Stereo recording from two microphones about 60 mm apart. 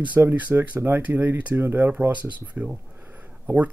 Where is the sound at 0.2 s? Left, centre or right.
Right.